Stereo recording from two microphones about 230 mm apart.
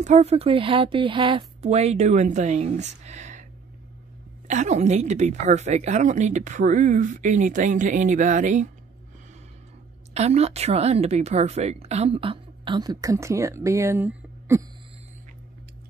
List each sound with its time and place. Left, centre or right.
0.0 s a woman's voice: right
4.5 s a woman's voice: right
10.1 s a woman's voice: right; by 14.6 s centre